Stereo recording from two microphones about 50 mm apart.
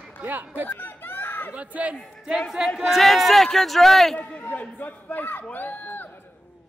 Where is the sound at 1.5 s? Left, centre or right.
Right.